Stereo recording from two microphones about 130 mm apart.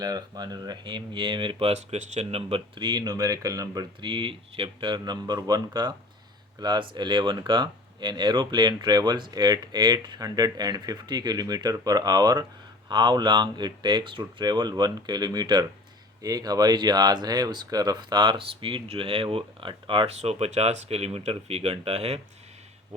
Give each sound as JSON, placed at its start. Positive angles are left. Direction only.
{"t": 0.0, "sound": "speech", "side_deg": -30}
{"t": 2.5, "sound": "speech", "side_deg": -35}
{"t": 4.1, "sound": "speech", "side_deg": -40}